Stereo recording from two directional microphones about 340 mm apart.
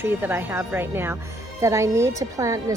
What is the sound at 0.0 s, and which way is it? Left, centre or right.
Speech, centre.